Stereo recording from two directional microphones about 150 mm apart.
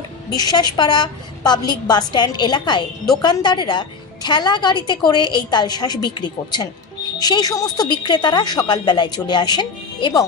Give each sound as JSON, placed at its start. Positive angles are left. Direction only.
{"t": 0.3, "sound": "a woman's voice", "side_deg": 25}